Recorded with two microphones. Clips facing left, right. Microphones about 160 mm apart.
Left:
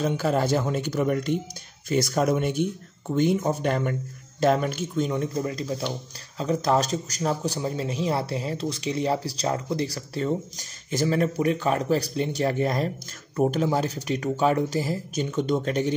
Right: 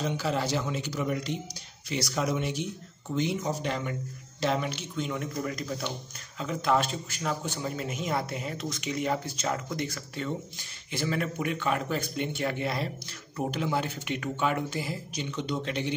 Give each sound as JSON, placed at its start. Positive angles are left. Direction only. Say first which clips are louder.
{"t": 0.0, "sound": "a man's voice", "louder": "left 6 dB", "side_deg": 50}